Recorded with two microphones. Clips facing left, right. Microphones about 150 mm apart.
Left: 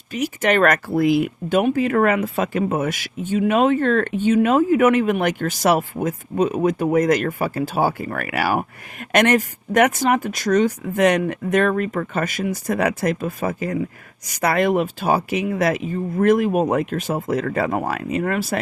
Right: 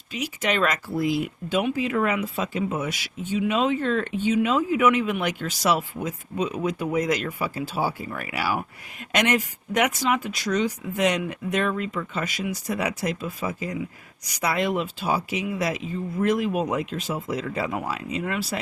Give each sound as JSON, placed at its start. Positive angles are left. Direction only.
{"t": 0.1, "sound": "speech", "side_deg": 50}